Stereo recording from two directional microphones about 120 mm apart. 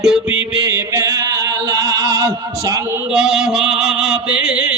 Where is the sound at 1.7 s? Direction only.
30° right (ahead or behind).